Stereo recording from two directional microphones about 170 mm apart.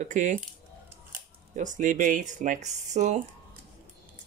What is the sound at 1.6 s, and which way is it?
Speech, 50° right (ahead or behind).